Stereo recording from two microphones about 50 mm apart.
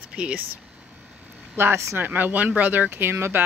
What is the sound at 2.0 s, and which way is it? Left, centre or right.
Speech, right.